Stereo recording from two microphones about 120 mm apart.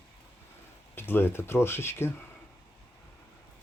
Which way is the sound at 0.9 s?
20° left (ahead or behind).